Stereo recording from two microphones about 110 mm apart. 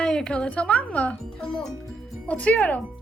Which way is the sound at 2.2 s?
10° left (ahead or behind).